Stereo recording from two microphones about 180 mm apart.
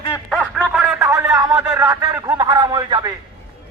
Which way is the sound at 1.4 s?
20° right (ahead or behind).